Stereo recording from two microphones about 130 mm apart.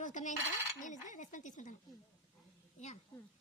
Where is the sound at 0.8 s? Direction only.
75° left (ahead or behind).